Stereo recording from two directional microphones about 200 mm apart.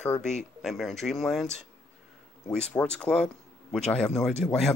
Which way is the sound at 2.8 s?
5° left (ahead or behind).